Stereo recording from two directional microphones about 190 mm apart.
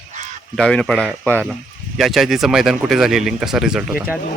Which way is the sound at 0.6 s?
5° left (ahead or behind).